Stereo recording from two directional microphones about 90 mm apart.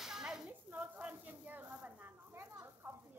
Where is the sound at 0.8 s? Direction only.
15° right (ahead or behind).